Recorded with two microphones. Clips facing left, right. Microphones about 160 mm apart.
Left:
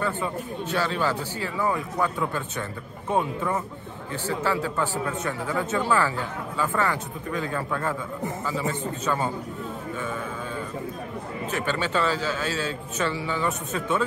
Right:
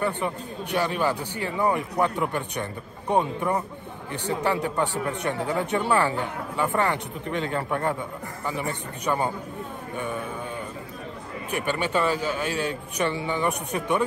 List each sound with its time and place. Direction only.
0.0 s speech: 20° right (ahead or behind)
9.0 s a man's voice: 15° right (ahead or behind)
11.5 s a man's voice: 15° right (ahead or behind)